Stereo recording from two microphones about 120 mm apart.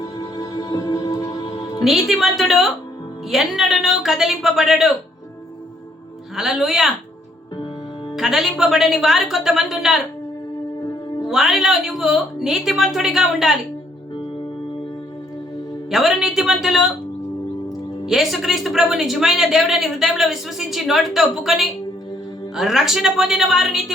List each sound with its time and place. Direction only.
0.0 s music: 30° left (ahead or behind)
1.8 s speech: centre (ahead or behind)
6.3 s speech: 5° right (ahead or behind)
8.1 s speech: 5° right (ahead or behind)
11.3 s speech: 5° right (ahead or behind)
15.9 s speech: centre (ahead or behind)
18.0 s speech: centre (ahead or behind)